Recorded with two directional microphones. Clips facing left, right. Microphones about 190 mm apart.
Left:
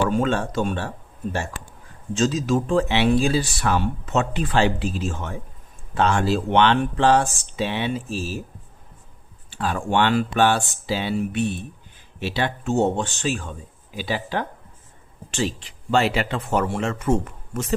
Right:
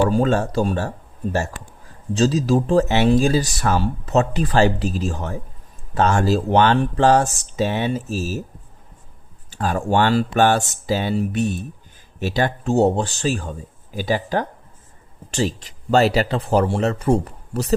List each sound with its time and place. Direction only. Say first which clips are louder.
0.1 s speech: right 3 dB; 40° right (ahead or behind)
9.5 s speech: right 3 dB; 45° right (ahead or behind)